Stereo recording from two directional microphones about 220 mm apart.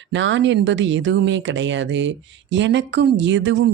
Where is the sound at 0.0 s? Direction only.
55° right (ahead or behind).